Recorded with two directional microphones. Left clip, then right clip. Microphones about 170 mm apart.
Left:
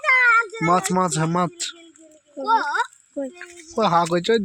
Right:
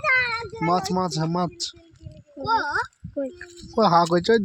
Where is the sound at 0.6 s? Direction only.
Centre (ahead or behind).